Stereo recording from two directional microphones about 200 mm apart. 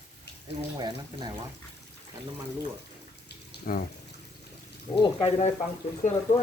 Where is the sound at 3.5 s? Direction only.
45° left (ahead or behind).